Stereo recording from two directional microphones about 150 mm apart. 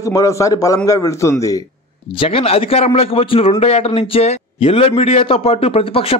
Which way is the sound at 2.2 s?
40° left (ahead or behind).